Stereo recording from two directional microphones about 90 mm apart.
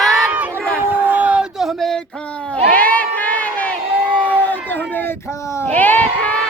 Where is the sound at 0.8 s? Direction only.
20° right (ahead or behind).